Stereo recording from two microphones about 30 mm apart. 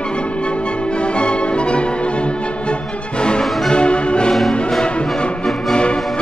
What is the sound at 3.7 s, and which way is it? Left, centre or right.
Music, left.